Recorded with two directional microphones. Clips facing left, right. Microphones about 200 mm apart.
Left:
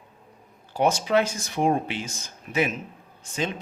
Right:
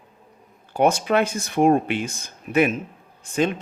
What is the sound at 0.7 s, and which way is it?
Speech, 55° right (ahead or behind).